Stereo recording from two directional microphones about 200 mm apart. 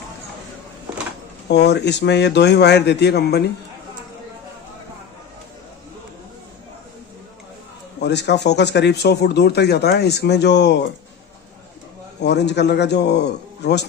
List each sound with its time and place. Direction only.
1.5 s speech: 55° left (ahead or behind)
8.0 s speech: 60° left (ahead or behind)
12.2 s speech: 60° left (ahead or behind)